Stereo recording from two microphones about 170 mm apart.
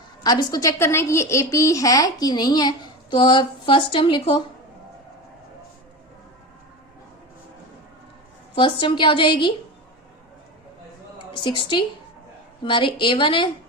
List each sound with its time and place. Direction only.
0.2 s speech: 25° left (ahead or behind)
8.5 s speech: 30° left (ahead or behind)
11.4 s speech: 30° left (ahead or behind)